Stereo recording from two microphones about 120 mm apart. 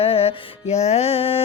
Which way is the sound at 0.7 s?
65° left (ahead or behind).